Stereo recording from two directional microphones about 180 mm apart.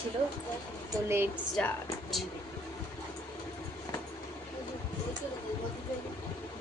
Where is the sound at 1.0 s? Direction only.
15° right (ahead or behind).